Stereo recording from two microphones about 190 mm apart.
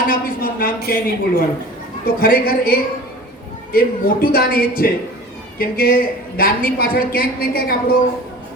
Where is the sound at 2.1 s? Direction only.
50° left (ahead or behind).